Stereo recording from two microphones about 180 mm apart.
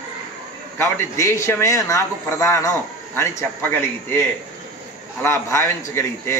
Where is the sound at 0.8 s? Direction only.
15° left (ahead or behind).